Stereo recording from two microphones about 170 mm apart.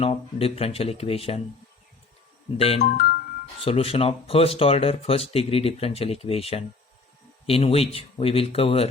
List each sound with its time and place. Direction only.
0.0 s speech: 35° left (ahead or behind)
2.6 s speech: 35° left (ahead or behind)
2.8 s speech: 60° left (ahead or behind)
3.6 s speech: 35° left (ahead or behind)